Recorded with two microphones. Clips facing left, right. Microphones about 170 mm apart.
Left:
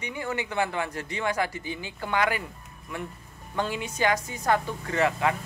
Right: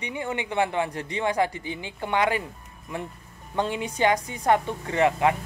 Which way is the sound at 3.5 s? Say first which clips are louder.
Right 3 dB; 25° right (ahead or behind).